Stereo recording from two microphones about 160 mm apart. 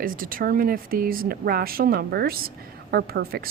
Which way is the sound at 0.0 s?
60° right (ahead or behind).